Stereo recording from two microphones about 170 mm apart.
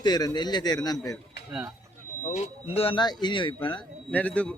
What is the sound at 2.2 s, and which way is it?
A man's voice, 35° left (ahead or behind).